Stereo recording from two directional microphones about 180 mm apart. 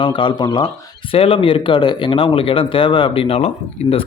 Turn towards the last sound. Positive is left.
turn(degrees=35)  # may be behind; listen again after turning